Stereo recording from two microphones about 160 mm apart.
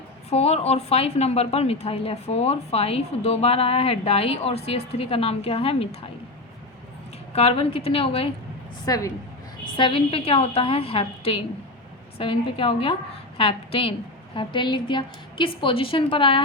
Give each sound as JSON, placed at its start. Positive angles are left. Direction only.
{"t": 0.3, "sound": "a woman's voice", "side_deg": 40}
{"t": 7.3, "sound": "a woman's voice", "side_deg": 40}
{"t": 8.8, "sound": "a woman's voice", "side_deg": 20}
{"t": 9.7, "sound": "a woman's voice", "side_deg": 30}